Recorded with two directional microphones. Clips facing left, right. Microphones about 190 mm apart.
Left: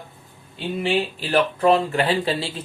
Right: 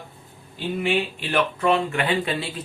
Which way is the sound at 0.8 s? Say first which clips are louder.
Left 2 dB; 35° left (ahead or behind).